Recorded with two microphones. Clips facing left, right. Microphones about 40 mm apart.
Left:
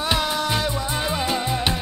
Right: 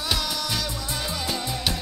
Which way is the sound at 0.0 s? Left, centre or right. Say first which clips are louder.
Left 5 dB; left.